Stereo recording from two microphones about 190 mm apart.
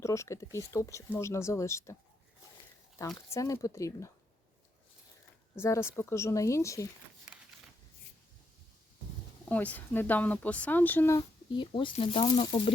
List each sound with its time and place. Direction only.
0.0 s speech: 15° left (ahead or behind)
3.2 s speech: 15° left (ahead or behind)
5.5 s speech: 15° left (ahead or behind)
9.5 s speech: 10° left (ahead or behind)
11.2 s speech: 25° left (ahead or behind)